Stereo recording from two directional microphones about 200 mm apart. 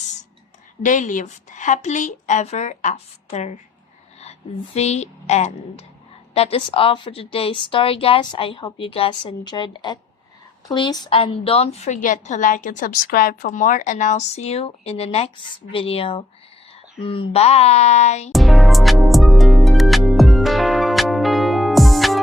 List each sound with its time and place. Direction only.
0.8 s a woman's voice: 40° left (ahead or behind)
18.3 s music: centre (ahead or behind)